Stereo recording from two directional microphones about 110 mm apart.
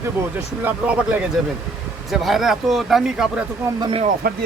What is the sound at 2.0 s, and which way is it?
Speech, centre (ahead or behind).